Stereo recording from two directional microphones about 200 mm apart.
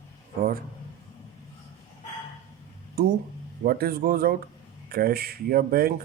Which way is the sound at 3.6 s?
50° right (ahead or behind).